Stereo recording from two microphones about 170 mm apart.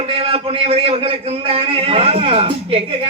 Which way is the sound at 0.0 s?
35° right (ahead or behind).